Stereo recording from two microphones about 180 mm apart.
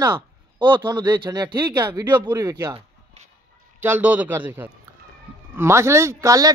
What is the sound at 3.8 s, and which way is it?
Speech, 10° right (ahead or behind).